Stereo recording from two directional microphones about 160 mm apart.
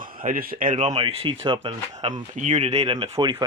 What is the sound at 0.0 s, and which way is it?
Speech, 60° right (ahead or behind).